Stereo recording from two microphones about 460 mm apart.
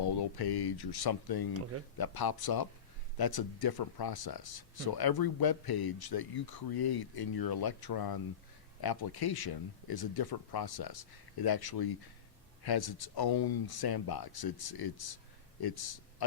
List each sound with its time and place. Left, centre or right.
0.0 s speech: left